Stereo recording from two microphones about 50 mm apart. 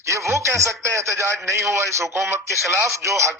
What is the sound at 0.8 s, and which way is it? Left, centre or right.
Speech, right.